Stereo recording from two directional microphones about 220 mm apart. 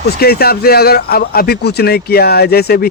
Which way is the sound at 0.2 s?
45° left (ahead or behind).